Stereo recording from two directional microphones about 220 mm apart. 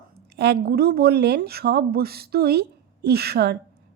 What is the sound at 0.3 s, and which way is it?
Speech, 45° right (ahead or behind).